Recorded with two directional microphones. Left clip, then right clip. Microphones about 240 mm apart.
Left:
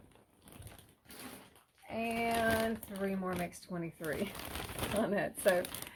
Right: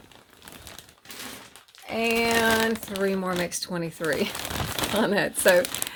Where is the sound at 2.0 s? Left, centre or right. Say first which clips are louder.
Right 11 dB; right.